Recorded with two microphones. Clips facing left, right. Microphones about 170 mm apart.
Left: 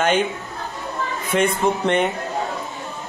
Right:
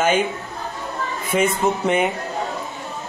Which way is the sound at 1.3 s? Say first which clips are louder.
Even; 5° right (ahead or behind).